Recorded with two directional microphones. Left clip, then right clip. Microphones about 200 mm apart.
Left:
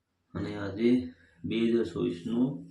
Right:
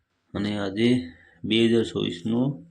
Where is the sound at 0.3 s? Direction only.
35° right (ahead or behind).